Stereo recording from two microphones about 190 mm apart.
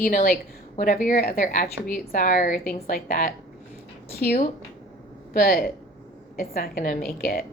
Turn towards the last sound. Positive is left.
turn(degrees=55)  # may be behind; listen again after turning